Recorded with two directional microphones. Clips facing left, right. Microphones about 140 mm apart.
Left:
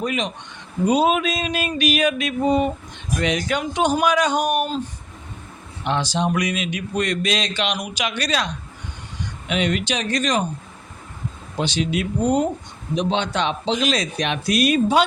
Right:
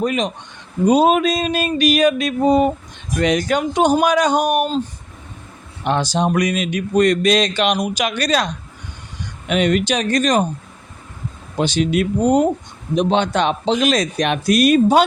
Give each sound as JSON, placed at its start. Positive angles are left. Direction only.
{"t": 0.0, "sound": "a sound", "side_deg": -40}
{"t": 3.2, "sound": "speech", "side_deg": -45}
{"t": 3.9, "sound": "a sound", "side_deg": -40}
{"t": 5.8, "sound": "speech", "side_deg": -45}
{"t": 9.5, "sound": "speech", "side_deg": -45}
{"t": 11.6, "sound": "speech", "side_deg": -50}